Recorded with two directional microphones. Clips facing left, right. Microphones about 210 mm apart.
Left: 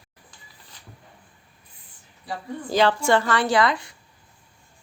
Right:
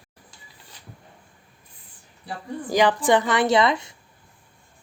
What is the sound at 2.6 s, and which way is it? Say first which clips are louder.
A woman's voice: right 1 dB; 15° right (ahead or behind).